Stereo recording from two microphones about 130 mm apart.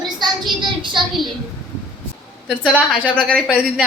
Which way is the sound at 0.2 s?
35° right (ahead or behind).